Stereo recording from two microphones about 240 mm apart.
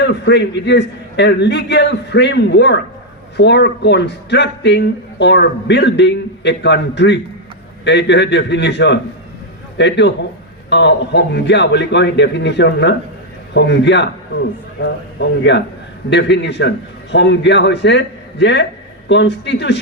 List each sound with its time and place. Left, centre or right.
0.0 s a man's voice: left